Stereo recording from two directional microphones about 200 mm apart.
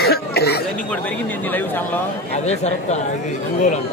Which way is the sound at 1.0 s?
10° left (ahead or behind).